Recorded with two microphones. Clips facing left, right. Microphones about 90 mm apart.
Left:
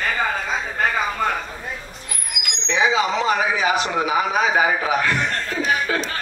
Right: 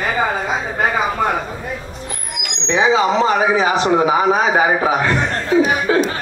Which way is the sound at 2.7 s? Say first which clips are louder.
Right 5 dB; 35° right (ahead or behind).